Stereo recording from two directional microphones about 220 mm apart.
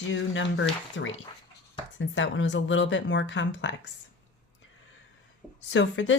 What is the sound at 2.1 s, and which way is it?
Speech, 60° left (ahead or behind).